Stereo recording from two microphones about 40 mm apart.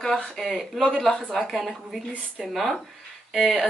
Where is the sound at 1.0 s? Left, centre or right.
Centre.